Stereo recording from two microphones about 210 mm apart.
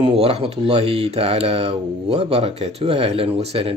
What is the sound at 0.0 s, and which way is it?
Speech, 25° right (ahead or behind).